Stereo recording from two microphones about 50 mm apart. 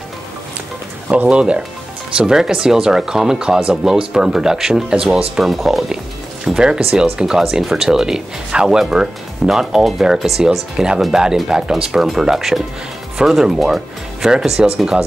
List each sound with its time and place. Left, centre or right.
1.0 s speech: right
1.3 s speech: centre
4.9 s speech: centre
5.4 s speech: centre
6.4 s speech: centre